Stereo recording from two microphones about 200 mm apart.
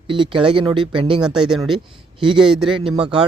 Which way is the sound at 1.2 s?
5° right (ahead or behind).